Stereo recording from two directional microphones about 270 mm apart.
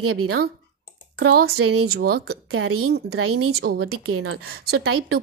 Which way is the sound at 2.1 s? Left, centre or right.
Right.